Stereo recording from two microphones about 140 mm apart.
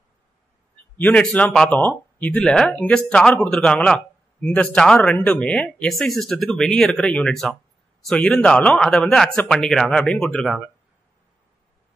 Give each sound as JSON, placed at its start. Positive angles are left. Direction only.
{"t": 0.9, "sound": "speech", "side_deg": 10}